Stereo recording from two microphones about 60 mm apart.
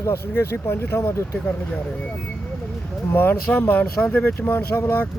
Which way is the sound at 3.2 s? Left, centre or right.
Left.